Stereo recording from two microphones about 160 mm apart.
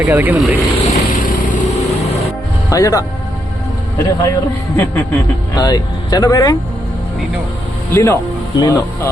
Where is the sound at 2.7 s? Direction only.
20° left (ahead or behind).